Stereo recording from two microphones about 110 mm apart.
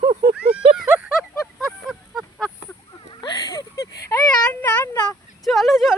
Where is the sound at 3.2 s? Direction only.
35° left (ahead or behind).